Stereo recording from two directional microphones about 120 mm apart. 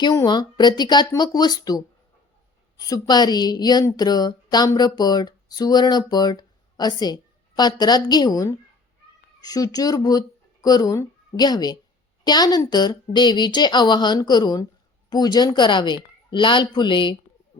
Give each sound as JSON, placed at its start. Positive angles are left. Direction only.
{"t": 0.3, "sound": "speech", "side_deg": 35}